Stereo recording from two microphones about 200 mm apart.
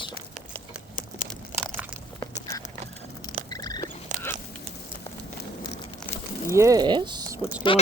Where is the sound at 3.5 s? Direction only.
20° left (ahead or behind).